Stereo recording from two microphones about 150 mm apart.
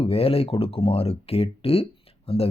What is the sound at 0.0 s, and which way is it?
Speech, 40° left (ahead or behind).